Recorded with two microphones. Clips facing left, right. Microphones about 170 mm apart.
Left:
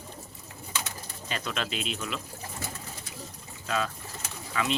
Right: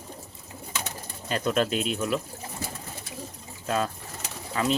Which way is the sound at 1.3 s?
45° right (ahead or behind).